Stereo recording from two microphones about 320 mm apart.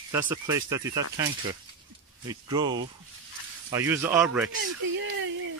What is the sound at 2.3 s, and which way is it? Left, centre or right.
Speech, centre.